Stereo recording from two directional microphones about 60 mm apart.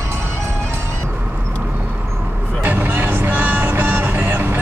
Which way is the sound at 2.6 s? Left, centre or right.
Right.